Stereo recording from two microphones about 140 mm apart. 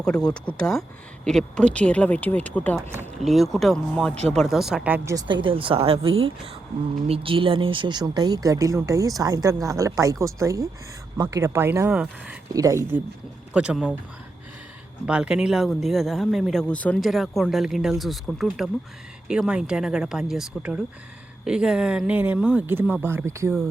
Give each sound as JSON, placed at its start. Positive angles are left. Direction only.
{"t": 0.4, "sound": "speech", "side_deg": 5}
{"t": 3.2, "sound": "speech", "side_deg": 0}
{"t": 4.1, "sound": "speech", "side_deg": -50}
{"t": 4.4, "sound": "speech", "side_deg": 0}
{"t": 5.1, "sound": "speech", "side_deg": -35}
{"t": 12.5, "sound": "speech", "side_deg": -20}
{"t": 13.5, "sound": "speech", "side_deg": -10}
{"t": 15.0, "sound": "speech", "side_deg": -5}